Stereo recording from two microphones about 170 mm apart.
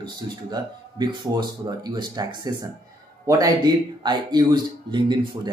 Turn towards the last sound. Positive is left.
turn(degrees=-25)  # may be behind; listen again after turning